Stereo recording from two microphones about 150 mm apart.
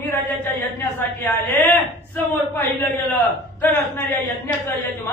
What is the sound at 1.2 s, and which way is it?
A man's voice, 15° left (ahead or behind).